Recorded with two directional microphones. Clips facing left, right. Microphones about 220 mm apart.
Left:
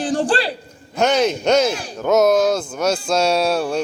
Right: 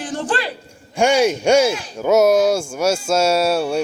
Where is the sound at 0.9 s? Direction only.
10° right (ahead or behind).